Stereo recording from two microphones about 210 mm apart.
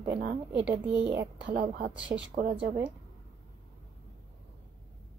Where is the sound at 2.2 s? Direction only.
50° right (ahead or behind).